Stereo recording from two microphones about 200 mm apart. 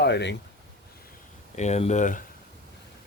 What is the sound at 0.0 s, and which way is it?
Speech, 60° left (ahead or behind).